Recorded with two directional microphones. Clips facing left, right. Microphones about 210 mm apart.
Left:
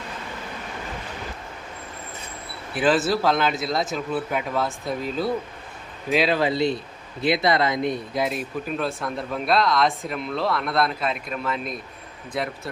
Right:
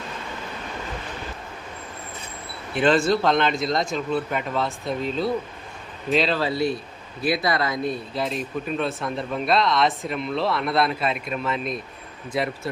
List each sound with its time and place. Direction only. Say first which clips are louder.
2.7 s speech: right 2 dB; 5° left (ahead or behind)